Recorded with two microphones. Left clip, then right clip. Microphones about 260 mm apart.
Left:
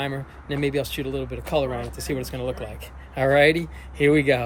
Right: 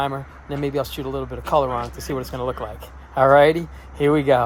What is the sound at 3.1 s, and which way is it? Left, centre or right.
Speech, centre.